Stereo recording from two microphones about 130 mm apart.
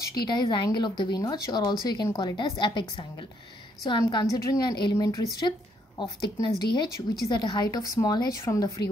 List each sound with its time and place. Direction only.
0.0 s speech: 35° left (ahead or behind)